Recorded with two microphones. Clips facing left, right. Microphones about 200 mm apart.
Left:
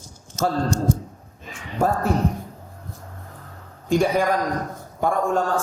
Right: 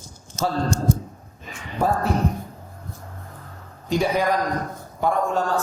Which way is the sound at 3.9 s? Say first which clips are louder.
Left 2 dB; 50° left (ahead or behind).